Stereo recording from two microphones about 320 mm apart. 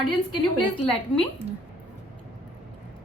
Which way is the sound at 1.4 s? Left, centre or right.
Centre.